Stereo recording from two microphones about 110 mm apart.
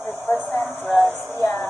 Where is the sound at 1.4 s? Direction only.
20° left (ahead or behind).